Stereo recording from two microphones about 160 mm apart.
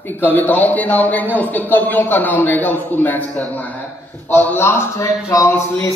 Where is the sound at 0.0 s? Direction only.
10° left (ahead or behind).